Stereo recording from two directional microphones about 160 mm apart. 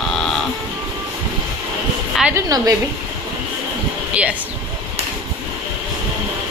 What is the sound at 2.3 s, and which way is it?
Speech, 20° right (ahead or behind).